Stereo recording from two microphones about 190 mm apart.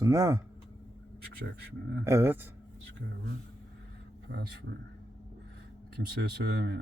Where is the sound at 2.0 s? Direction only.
15° right (ahead or behind).